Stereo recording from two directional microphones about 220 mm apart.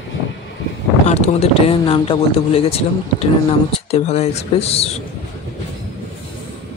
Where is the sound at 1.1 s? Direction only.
30° left (ahead or behind).